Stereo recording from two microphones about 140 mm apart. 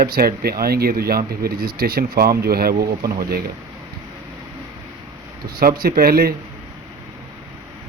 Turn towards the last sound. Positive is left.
turn(degrees=-90)